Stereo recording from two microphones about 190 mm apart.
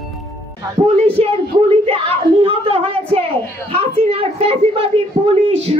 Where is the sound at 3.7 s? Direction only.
30° right (ahead or behind).